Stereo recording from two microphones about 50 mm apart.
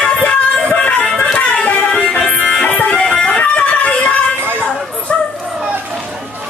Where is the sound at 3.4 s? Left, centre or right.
Left.